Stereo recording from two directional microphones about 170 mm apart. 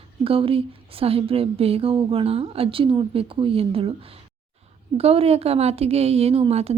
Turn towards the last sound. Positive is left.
turn(degrees=-35)  # may be behind; listen again after turning